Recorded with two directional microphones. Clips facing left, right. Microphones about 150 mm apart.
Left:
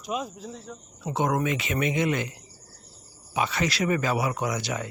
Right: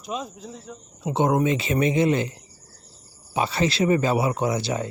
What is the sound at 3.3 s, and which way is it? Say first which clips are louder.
Speech: right 4 dB; 30° right (ahead or behind).